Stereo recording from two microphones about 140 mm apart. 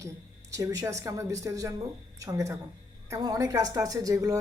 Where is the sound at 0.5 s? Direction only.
25° right (ahead or behind).